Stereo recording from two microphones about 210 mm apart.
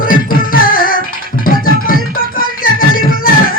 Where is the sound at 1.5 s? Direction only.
40° left (ahead or behind).